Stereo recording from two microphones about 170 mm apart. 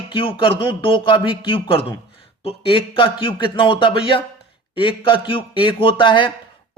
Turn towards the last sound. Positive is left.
turn(degrees=30)  # may be behind; listen again after turning